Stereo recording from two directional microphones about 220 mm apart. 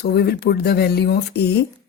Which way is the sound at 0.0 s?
45° left (ahead or behind).